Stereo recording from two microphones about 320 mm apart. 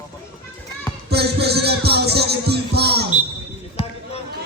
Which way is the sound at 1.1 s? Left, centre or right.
Right.